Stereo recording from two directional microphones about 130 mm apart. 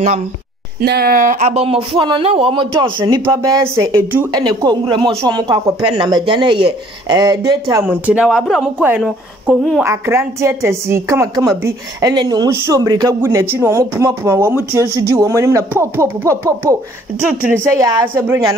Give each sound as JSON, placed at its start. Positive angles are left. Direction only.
{"t": 1.1, "sound": "speech", "side_deg": -70}
{"t": 3.3, "sound": "a woman's voice", "side_deg": -25}
{"t": 4.3, "sound": "a woman's voice", "side_deg": -30}
{"t": 7.8, "sound": "speech", "side_deg": -10}
{"t": 9.8, "sound": "a woman's voice", "side_deg": -20}
{"t": 17.7, "sound": "a woman's voice", "side_deg": -30}
{"t": 18.0, "sound": "speech", "side_deg": -15}